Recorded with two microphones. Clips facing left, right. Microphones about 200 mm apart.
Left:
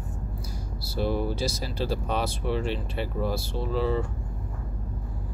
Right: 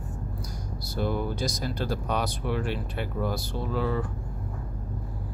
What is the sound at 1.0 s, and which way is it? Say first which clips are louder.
Speech: left 2 dB; 30° left (ahead or behind).